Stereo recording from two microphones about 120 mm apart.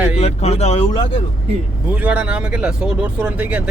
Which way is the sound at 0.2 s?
65° left (ahead or behind).